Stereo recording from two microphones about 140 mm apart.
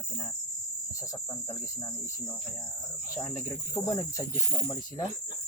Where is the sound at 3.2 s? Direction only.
10° left (ahead or behind).